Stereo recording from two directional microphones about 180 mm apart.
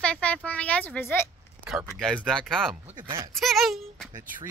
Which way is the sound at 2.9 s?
25° right (ahead or behind).